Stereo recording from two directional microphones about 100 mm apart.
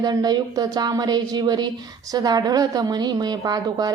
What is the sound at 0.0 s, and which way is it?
Speech, 40° right (ahead or behind).